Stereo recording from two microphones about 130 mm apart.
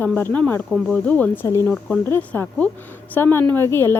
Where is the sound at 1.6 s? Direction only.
Centre (ahead or behind).